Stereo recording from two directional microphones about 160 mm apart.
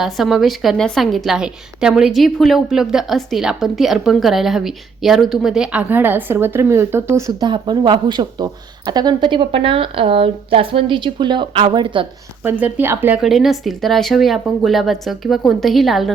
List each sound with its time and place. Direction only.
0.0 s a woman's voice: centre (ahead or behind); by 12.0 s 30° right (ahead or behind)
12.4 s speech: 10° right (ahead or behind)
13.2 s a woman's voice: centre (ahead or behind)